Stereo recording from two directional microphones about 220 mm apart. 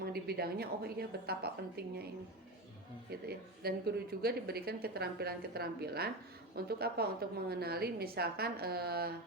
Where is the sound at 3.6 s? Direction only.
45° right (ahead or behind).